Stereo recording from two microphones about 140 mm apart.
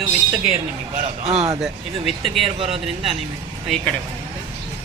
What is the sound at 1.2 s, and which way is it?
A man's voice, 50° right (ahead or behind).